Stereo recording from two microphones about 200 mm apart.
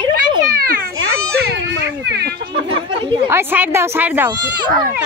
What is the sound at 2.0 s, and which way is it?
Speech, 55° right (ahead or behind).